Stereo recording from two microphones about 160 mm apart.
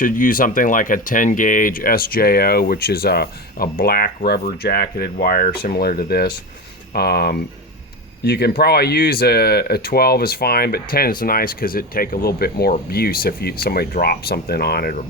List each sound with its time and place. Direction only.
0.0 s speech: 60° left (ahead or behind); by 14.9 s 75° left (ahead or behind)